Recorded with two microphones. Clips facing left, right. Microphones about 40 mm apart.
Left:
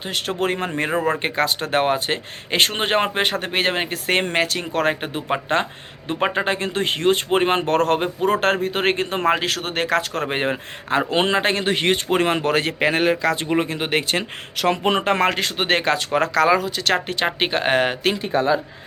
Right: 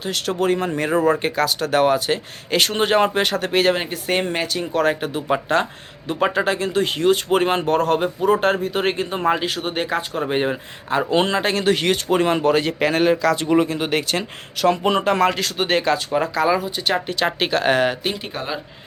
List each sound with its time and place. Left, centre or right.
0.0 s speech: left
3.8 s a man's voice: left
7.3 s speech: left
7.7 s a man's voice: left
11.1 s speech: left
12.8 s speech: left
17.2 s speech: left